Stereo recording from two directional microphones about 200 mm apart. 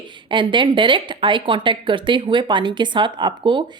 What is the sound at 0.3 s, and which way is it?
A woman's voice, 25° right (ahead or behind).